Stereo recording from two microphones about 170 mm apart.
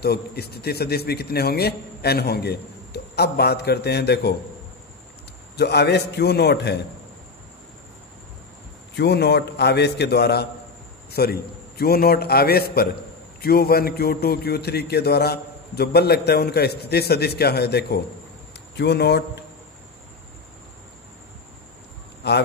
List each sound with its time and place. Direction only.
0.0 s a man's voice: 70° left (ahead or behind)
5.6 s a man's voice: 75° left (ahead or behind)
8.9 s a man's voice: 80° left
22.2 s a man's voice: 75° left (ahead or behind)